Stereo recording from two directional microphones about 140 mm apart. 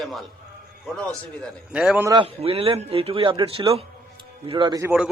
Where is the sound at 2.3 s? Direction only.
45° right (ahead or behind).